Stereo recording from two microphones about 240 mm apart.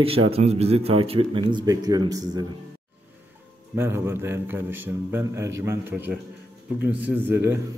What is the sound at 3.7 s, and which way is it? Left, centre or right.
A man's voice, centre.